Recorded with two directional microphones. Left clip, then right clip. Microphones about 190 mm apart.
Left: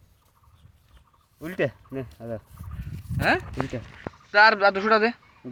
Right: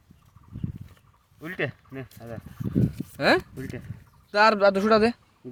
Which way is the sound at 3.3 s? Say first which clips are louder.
Right 1 dB; 85° right.